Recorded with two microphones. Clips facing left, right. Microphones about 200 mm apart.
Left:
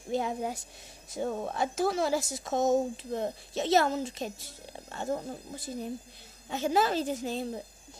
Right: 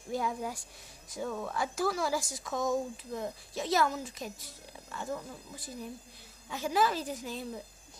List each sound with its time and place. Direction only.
0.1 s speech: 25° left (ahead or behind)